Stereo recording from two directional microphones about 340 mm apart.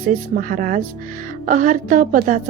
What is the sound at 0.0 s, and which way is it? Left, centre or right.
A woman's voice, right.